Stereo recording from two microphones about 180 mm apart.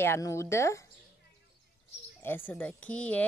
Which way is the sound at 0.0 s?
15° left (ahead or behind).